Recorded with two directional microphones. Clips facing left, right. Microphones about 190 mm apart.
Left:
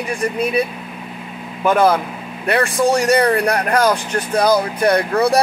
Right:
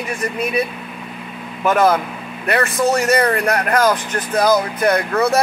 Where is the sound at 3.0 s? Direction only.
35° left (ahead or behind).